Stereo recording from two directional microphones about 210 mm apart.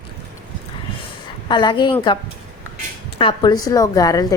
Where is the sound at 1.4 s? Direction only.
20° left (ahead or behind).